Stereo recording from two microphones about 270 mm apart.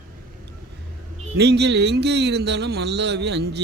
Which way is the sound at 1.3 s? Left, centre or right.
Right.